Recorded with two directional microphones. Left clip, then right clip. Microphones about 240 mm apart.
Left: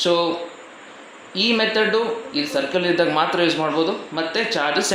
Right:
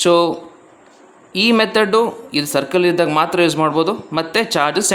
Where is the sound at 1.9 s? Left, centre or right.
Right.